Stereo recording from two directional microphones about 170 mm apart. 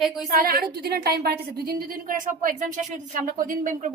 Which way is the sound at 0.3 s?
60° right (ahead or behind).